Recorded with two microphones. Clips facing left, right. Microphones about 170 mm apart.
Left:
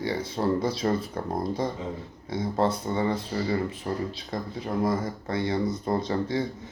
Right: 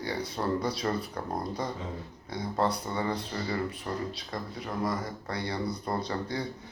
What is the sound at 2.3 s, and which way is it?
Speech, 25° left (ahead or behind).